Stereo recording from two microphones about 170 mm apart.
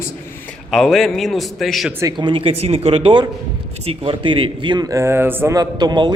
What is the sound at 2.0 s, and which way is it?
A man's voice, 25° right (ahead or behind).